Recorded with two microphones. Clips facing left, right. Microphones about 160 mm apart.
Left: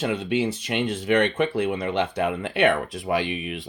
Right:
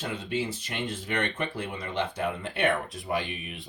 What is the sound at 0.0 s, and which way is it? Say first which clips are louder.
Speech: left 7 dB; 80° left.